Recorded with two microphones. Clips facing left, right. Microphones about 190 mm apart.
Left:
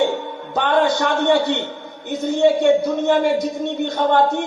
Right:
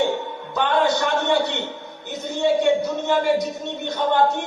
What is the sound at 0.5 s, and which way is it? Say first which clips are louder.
A man's voice: left 2 dB; 55° left (ahead or behind).